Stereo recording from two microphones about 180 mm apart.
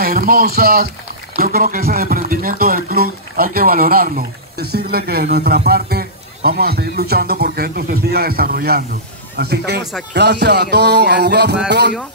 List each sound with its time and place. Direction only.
0.0 s a man's voice: 55° right (ahead or behind)
10.1 s music: 70° right (ahead or behind)